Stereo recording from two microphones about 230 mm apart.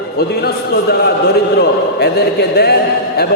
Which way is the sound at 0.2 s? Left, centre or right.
Left.